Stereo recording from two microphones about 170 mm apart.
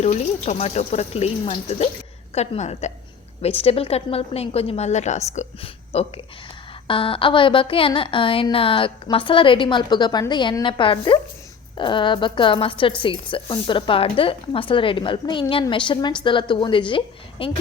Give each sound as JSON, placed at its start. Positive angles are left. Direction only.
{"t": 0.0, "sound": "a woman's voice", "side_deg": 40}